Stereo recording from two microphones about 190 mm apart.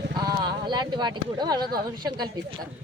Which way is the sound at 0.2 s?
20° right (ahead or behind).